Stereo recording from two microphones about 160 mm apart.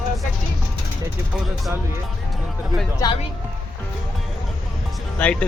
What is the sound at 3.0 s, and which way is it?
Speech, 20° left (ahead or behind).